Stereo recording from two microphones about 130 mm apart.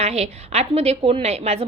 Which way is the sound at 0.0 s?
55° right (ahead or behind).